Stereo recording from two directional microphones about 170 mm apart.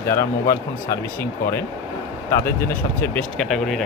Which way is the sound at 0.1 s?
15° left (ahead or behind).